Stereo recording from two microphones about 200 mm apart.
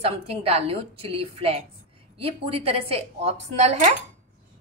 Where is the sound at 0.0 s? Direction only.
30° right (ahead or behind).